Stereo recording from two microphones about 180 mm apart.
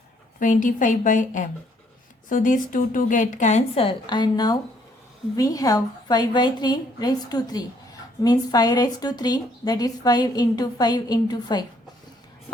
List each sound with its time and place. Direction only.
0.3 s a woman's voice: 45° left (ahead or behind); by 11.6 s 20° left (ahead or behind)